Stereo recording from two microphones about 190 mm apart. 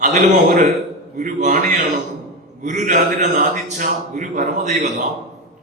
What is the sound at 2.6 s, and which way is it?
A man's voice, 40° right (ahead or behind).